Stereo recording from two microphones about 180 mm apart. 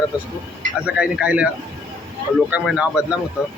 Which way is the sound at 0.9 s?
5° right (ahead or behind).